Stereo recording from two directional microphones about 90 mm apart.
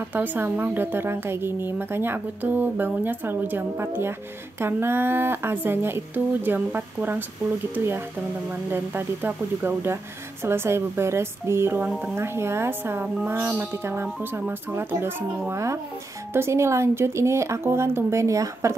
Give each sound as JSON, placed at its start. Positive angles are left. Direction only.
{"t": 0.1, "sound": "speech", "side_deg": -20}